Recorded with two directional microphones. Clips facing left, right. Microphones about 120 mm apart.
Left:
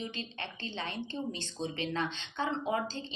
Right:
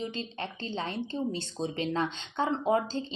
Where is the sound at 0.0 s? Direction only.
35° right (ahead or behind).